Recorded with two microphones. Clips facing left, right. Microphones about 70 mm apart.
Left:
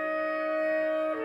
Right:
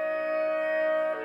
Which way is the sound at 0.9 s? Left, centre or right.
Centre.